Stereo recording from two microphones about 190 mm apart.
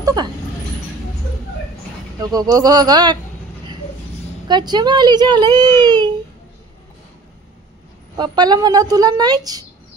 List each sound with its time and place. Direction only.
0.0 s speech: 20° right (ahead or behind)
2.1 s a child's voice: 20° right (ahead or behind)
4.5 s a child's voice: 25° right (ahead or behind)
8.2 s a child's voice: 20° right (ahead or behind)